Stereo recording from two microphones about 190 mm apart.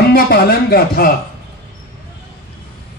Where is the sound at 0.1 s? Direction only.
55° left (ahead or behind).